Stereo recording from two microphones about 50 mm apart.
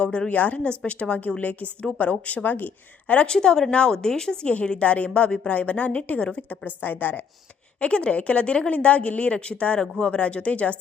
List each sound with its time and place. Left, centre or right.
0.0 s a woman's voice: left
3.2 s a woman's voice: centre; by 7.2 s left
7.8 s a woman's voice: left